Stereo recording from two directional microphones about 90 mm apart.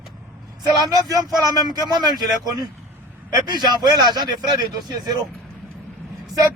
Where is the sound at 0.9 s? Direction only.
45° right (ahead or behind).